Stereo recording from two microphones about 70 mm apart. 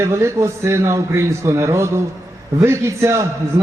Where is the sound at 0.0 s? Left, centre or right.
Right.